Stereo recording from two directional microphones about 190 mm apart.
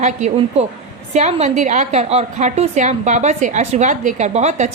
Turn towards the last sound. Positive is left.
turn(degrees=-35)  # may be behind; listen again after turning